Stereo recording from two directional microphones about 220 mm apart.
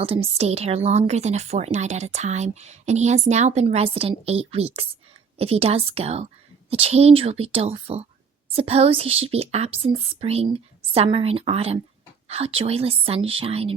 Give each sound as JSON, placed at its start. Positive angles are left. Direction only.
{"t": 0.0, "sound": "a woman's voice", "side_deg": -25}